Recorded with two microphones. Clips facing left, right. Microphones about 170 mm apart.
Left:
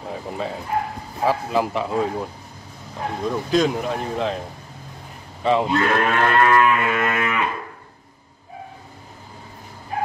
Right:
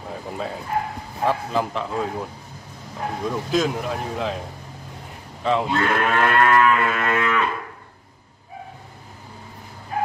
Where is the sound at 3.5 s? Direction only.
Centre (ahead or behind).